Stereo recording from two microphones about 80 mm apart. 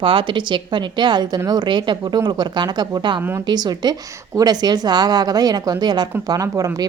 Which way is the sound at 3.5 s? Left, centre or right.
Right.